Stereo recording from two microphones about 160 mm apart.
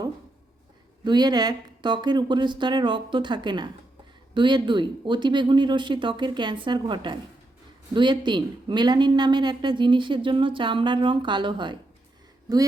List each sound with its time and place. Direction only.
1.0 s speech: 25° right (ahead or behind)